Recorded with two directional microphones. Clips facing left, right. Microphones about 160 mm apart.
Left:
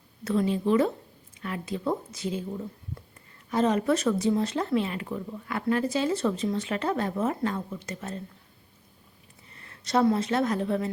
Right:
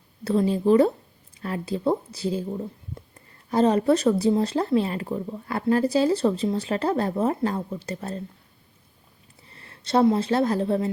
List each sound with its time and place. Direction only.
0.3 s speech: 35° right (ahead or behind)
9.5 s speech: 30° right (ahead or behind)